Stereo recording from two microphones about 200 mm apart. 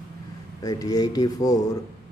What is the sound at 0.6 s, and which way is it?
Speech, 20° left (ahead or behind).